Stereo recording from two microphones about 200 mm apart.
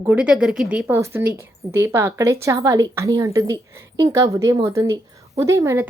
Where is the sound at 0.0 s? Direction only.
5° right (ahead or behind).